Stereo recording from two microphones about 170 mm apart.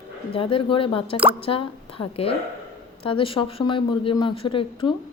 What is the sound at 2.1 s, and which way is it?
Speech, 35° left (ahead or behind).